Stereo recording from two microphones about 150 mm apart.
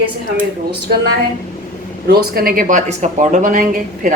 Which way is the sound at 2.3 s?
75° right (ahead or behind).